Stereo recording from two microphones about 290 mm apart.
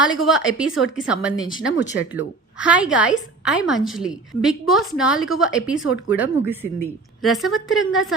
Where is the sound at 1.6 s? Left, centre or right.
Left.